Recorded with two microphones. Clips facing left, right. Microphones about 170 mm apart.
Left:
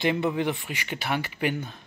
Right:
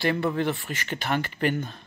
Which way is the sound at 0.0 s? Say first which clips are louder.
Even; 15° left (ahead or behind).